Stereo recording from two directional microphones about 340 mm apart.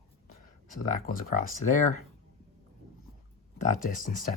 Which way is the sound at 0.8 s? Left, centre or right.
Left.